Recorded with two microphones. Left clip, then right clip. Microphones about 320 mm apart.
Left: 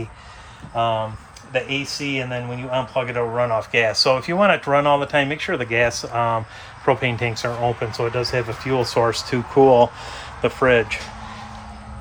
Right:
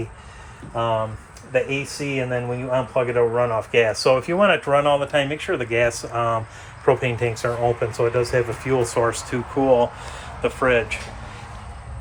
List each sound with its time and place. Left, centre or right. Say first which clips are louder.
0.8 s speech: left 1 dB; centre